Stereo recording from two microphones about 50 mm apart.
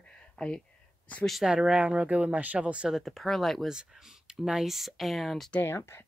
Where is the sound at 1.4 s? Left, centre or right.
Centre.